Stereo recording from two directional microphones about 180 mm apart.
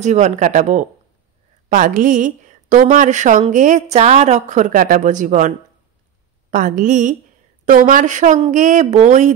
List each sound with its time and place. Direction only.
0.0 s a woman's voice: 40° right (ahead or behind)
6.5 s a woman's voice: 45° right (ahead or behind)